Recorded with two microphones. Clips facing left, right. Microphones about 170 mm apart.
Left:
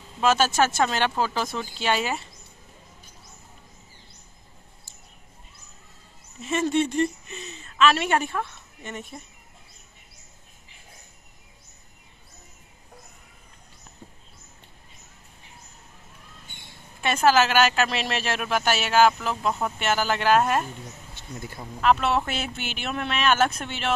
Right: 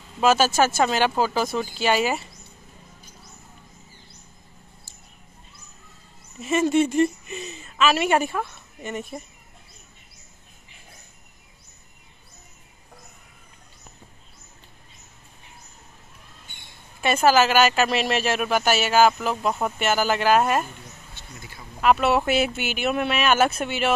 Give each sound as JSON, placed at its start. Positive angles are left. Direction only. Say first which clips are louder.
{"t": 0.2, "sound": "speech", "louder": "right 2 dB", "side_deg": -5}
{"t": 6.4, "sound": "a woman's voice", "louder": "right 4 dB", "side_deg": -5}
{"t": 17.0, "sound": "speech", "louder": "right 2 dB", "side_deg": -5}
{"t": 21.4, "sound": "speech", "louder": "left 8 dB", "side_deg": 50}
{"t": 21.8, "sound": "speech", "louder": "right 3 dB", "side_deg": -5}